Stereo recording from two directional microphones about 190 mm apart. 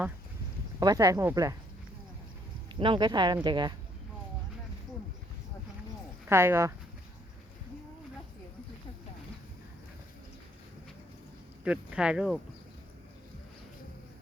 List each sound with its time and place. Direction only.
0.8 s speech: 20° right (ahead or behind)
2.7 s speech: 25° right (ahead or behind)
6.2 s speech: 15° right (ahead or behind)
11.6 s speech: 5° right (ahead or behind)